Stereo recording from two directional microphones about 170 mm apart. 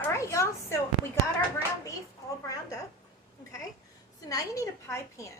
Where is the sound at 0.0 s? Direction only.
15° left (ahead or behind).